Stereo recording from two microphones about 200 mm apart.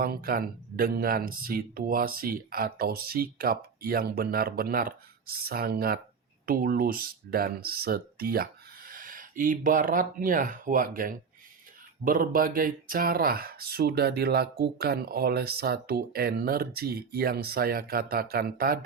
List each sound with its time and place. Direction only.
0.0 s speech: 50° right (ahead or behind)